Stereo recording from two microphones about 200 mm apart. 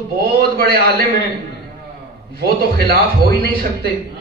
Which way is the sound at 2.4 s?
50° right (ahead or behind).